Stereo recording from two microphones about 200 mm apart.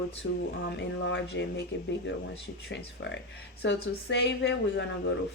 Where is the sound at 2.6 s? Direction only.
65° left (ahead or behind).